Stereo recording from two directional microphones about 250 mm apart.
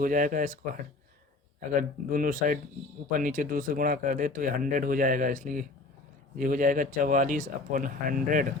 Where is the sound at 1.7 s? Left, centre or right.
Right.